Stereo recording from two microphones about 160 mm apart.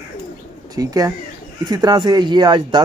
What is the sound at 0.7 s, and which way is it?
Speech, 25° right (ahead or behind).